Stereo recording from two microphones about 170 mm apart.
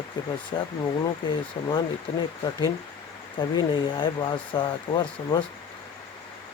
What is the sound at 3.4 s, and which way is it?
Speech, 30° left (ahead or behind).